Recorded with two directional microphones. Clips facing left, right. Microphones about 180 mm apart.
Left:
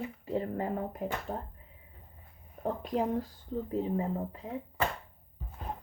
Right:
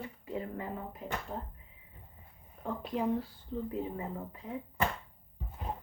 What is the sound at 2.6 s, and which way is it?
Speech, 40° left (ahead or behind).